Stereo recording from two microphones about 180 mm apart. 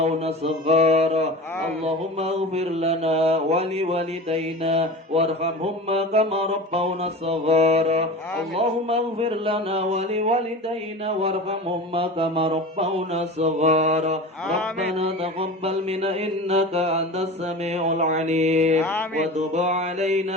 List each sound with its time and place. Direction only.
0.0 s mantra: 35° right (ahead or behind)
18.8 s mantra: 10° left (ahead or behind)
19.4 s mantra: 40° right (ahead or behind)